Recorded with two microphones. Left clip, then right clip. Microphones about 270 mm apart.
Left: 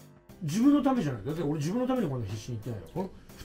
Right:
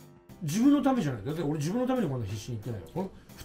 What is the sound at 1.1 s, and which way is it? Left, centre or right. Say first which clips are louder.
Speech: even; right.